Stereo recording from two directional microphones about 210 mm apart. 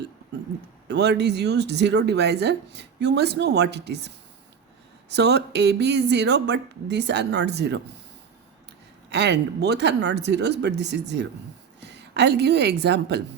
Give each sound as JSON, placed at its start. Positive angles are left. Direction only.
{"t": 0.9, "sound": "speech", "side_deg": -55}
{"t": 9.0, "sound": "a woman's voice", "side_deg": -55}